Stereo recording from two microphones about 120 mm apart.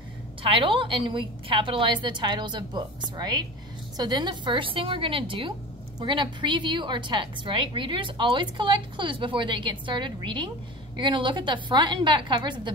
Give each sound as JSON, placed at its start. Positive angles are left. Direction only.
{"t": 0.4, "sound": "a woman's voice", "side_deg": -45}